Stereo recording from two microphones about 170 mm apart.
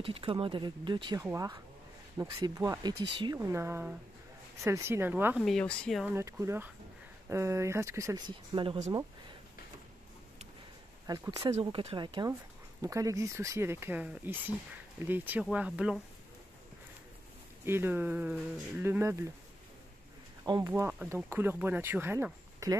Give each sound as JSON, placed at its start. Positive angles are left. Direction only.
{"t": 0.0, "sound": "speech", "side_deg": -35}
{"t": 5.4, "sound": "speech", "side_deg": 5}
{"t": 6.0, "sound": "speech", "side_deg": -15}
{"t": 8.5, "sound": "speech", "side_deg": -35}
{"t": 11.1, "sound": "speech", "side_deg": -25}
{"t": 17.6, "sound": "speech", "side_deg": -15}
{"t": 20.4, "sound": "speech", "side_deg": -25}